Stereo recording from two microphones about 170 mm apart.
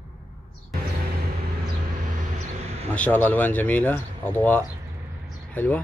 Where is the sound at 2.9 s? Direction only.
10° left (ahead or behind).